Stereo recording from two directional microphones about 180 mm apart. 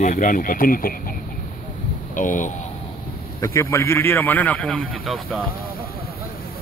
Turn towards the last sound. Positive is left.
turn(degrees=0)  # may be behind; listen again after turning